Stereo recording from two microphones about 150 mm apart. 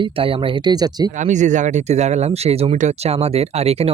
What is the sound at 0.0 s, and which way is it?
Speech, 35° right (ahead or behind).